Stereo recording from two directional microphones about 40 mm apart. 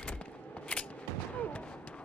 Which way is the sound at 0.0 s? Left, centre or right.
Left.